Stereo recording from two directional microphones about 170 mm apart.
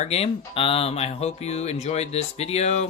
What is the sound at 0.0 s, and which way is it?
Speech, 35° left (ahead or behind).